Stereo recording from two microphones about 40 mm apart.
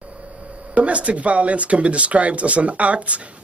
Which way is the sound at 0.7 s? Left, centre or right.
Right.